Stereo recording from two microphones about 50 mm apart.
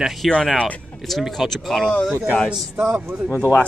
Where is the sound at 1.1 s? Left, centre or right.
Centre.